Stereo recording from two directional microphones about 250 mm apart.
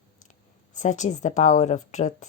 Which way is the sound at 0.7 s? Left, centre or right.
Left.